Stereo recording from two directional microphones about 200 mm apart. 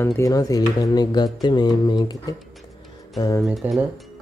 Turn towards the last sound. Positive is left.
turn(degrees=-5)  # may be behind; listen again after turning